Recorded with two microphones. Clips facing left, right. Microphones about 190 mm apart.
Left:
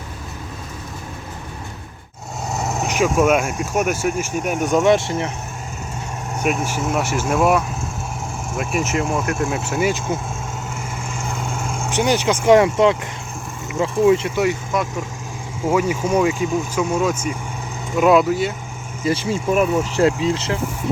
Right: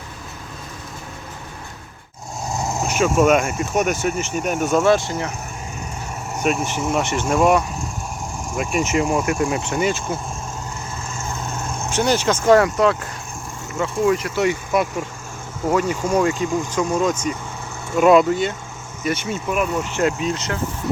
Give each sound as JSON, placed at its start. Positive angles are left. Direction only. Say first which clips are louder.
{"t": 2.5, "sound": "vehicle", "louder": "left 1 dB", "side_deg": 5}
{"t": 2.8, "sound": "vehicle", "louder": "left 1 dB", "side_deg": 15}
{"t": 3.1, "sound": "speech", "louder": "right 2 dB", "side_deg": 0}
{"t": 6.4, "sound": "speech", "louder": "even", "side_deg": 5}
{"t": 11.2, "sound": "vehicle", "louder": "left 2 dB", "side_deg": 10}
{"t": 12.6, "sound": "speech", "louder": "left 2 dB", "side_deg": 25}
{"t": 14.0, "sound": "speech", "louder": "left 4 dB", "side_deg": 20}
{"t": 15.7, "sound": "speech", "louder": "left 1 dB", "side_deg": 10}
{"t": 19.0, "sound": "speech", "louder": "left 4 dB", "side_deg": 30}